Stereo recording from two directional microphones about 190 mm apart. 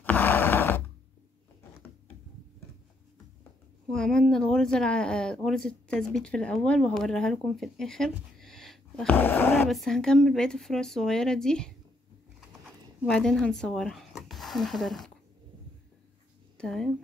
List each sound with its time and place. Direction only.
0.0 s a sound: 10° left (ahead or behind)
3.9 s speech: 5° left (ahead or behind)
9.7 s speech: centre (ahead or behind)
13.0 s speech: 5° left (ahead or behind)
16.5 s speech: 5° left (ahead or behind)